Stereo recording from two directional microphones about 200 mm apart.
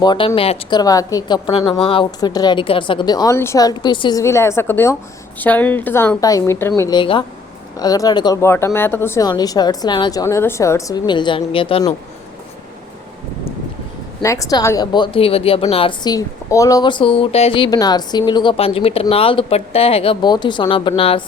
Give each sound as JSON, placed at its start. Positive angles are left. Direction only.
{"t": 0.0, "sound": "a woman's voice", "side_deg": 25}
{"t": 14.2, "sound": "a woman's voice", "side_deg": 15}